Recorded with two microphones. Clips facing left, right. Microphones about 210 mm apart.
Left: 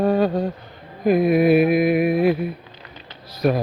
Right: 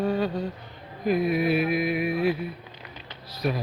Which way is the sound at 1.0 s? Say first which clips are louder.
Left 7 dB; 55° left (ahead or behind).